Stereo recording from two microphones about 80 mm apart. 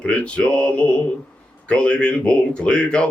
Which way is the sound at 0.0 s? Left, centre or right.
Centre.